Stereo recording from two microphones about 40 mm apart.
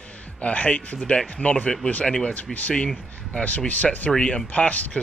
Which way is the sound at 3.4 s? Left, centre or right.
Left.